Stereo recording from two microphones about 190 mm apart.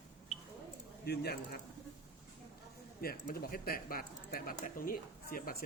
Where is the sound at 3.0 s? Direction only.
50° left (ahead or behind).